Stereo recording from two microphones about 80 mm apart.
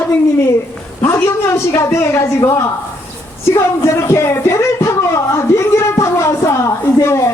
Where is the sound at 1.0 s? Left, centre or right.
Left.